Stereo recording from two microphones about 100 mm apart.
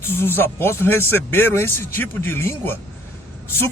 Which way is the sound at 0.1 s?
20° left (ahead or behind).